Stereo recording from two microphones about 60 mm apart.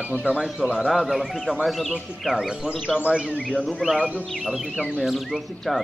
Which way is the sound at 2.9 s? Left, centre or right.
Centre.